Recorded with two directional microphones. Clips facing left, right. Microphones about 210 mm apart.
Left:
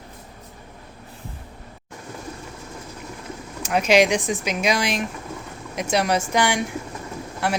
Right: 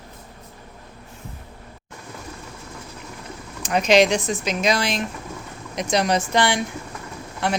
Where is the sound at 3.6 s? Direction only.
10° left (ahead or behind).